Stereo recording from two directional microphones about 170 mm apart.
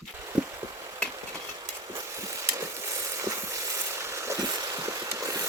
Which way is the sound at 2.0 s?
15° right (ahead or behind).